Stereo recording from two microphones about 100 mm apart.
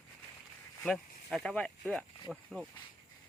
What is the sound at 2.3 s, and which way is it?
Speech, 5° right (ahead or behind).